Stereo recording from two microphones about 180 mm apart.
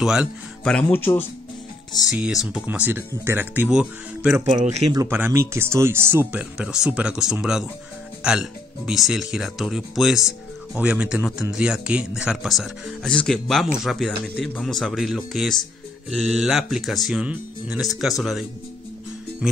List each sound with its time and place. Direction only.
0.0 s speech: 5° right (ahead or behind)
0.7 s speech: 10° left (ahead or behind)
2.0 s speech: 5° right (ahead or behind)
4.5 s a man's voice: 35° right (ahead or behind)
4.9 s speech: 15° right (ahead or behind)